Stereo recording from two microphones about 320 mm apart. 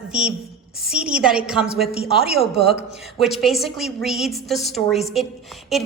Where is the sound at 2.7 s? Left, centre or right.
Centre.